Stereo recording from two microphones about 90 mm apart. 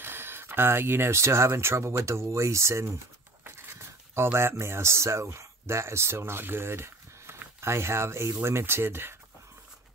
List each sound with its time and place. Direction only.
0.0 s speech: 25° right (ahead or behind)